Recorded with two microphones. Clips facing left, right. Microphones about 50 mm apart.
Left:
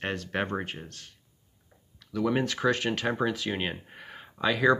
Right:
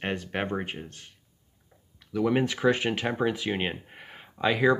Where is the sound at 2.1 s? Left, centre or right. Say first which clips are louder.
Right 2 dB; centre.